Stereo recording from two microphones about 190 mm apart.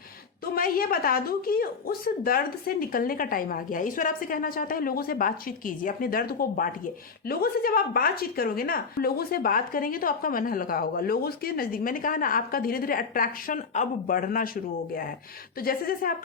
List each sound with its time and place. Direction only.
0.5 s speech: 50° left (ahead or behind)